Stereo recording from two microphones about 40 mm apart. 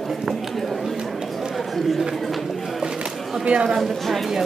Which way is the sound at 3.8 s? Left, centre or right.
Centre.